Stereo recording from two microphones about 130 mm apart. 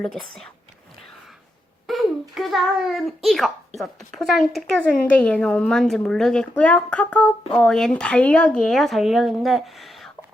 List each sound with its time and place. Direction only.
0.0 s speech: 5° left (ahead or behind)
1.9 s a child's voice: centre (ahead or behind)